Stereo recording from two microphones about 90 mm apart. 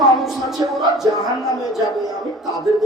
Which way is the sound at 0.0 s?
Centre (ahead or behind).